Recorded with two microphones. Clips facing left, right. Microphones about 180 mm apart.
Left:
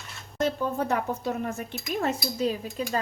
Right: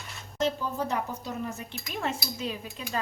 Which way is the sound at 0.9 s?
50° left (ahead or behind).